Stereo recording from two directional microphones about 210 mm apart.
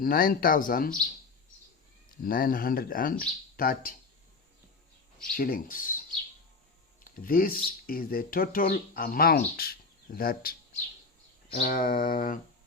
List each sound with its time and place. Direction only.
0.0 s speech: 45° left (ahead or behind)
2.2 s speech: 40° left (ahead or behind)
5.4 s speech: 40° left (ahead or behind)
7.0 s speech: 45° left (ahead or behind)
11.6 s speech: 40° left (ahead or behind)